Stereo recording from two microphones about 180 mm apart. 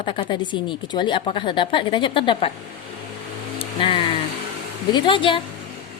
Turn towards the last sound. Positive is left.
turn(degrees=30)  # may be behind; listen again after turning